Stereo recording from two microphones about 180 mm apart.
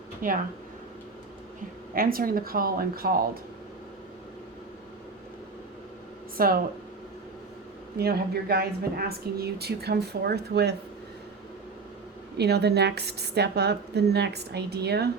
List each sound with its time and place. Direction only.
0.2 s speech: 50° right (ahead or behind)
1.9 s speech: 55° right (ahead or behind)
6.3 s speech: 55° right (ahead or behind)
7.9 s speech: 60° right (ahead or behind)
12.4 s speech: 65° right (ahead or behind)